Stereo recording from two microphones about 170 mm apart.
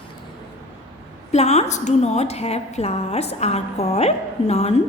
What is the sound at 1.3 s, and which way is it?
A woman's voice, 40° left (ahead or behind).